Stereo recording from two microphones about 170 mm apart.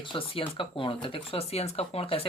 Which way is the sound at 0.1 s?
30° left (ahead or behind).